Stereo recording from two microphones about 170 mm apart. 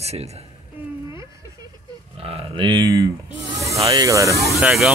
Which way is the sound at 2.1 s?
35° right (ahead or behind).